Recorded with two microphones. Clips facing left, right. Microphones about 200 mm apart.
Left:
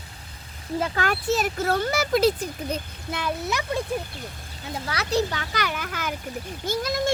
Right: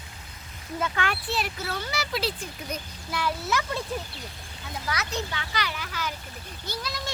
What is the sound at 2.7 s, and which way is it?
A child's voice, 25° left (ahead or behind).